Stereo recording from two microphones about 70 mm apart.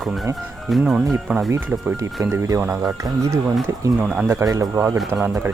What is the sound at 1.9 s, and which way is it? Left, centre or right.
Speech, right.